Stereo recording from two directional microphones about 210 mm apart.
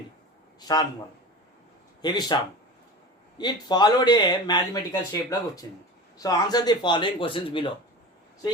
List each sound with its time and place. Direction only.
0.6 s speech: 20° left (ahead or behind)
2.0 s a man's voice: 20° left (ahead or behind)